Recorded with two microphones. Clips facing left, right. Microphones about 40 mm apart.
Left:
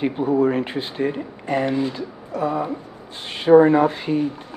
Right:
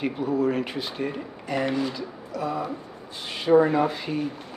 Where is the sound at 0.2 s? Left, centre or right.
Left.